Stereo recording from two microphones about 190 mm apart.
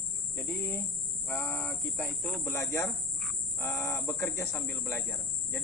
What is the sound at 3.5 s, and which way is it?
Speech, 15° left (ahead or behind).